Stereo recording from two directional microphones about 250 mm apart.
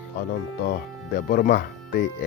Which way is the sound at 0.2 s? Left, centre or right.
Left.